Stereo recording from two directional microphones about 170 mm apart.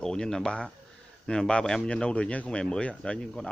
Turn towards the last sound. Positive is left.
turn(degrees=5)  # may be behind; listen again after turning